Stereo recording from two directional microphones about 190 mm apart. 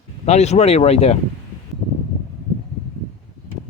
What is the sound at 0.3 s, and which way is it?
Speech, 35° left (ahead or behind).